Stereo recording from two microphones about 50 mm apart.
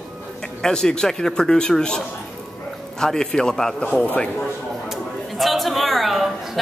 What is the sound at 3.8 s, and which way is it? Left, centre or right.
Speech, left.